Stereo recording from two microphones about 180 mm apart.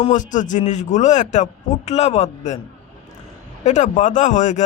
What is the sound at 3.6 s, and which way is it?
A man's voice, 40° left (ahead or behind).